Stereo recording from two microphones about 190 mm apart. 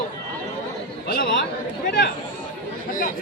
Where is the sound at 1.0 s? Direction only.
50° left (ahead or behind).